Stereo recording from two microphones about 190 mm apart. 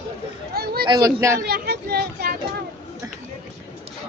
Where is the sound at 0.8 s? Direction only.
20° right (ahead or behind).